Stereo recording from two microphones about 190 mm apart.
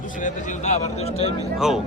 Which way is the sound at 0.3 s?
40° left (ahead or behind).